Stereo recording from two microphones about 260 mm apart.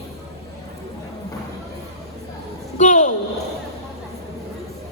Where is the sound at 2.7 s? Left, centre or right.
Left.